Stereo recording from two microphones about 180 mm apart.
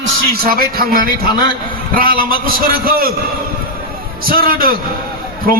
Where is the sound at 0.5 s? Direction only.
55° right (ahead or behind).